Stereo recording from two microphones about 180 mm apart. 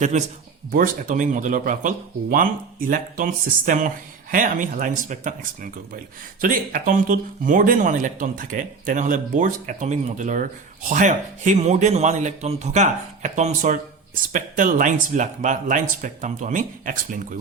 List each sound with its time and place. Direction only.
0.0 s a man's voice: 40° right (ahead or behind)
6.4 s a man's voice: 50° right (ahead or behind)